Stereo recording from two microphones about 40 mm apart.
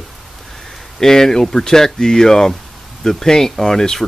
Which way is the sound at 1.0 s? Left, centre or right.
Centre.